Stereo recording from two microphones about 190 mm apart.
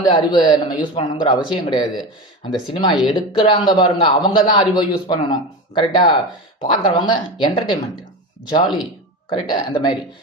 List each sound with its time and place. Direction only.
0.0 s speech: 25° left (ahead or behind)
2.9 s speech: centre (ahead or behind)
3.2 s speech: 25° left (ahead or behind)